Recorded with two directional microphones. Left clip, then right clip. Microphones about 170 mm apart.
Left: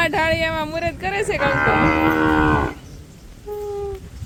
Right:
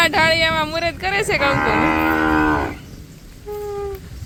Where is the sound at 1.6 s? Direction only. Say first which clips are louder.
Even; 25° right (ahead or behind).